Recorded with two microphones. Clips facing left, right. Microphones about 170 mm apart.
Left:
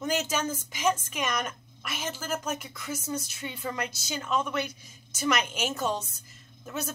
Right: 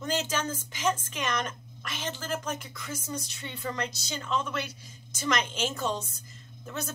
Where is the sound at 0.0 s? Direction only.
10° left (ahead or behind).